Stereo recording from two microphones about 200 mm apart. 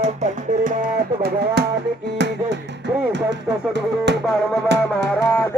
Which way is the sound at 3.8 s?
60° right (ahead or behind).